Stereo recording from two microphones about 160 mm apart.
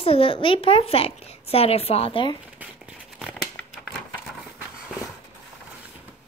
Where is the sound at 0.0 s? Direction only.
35° left (ahead or behind).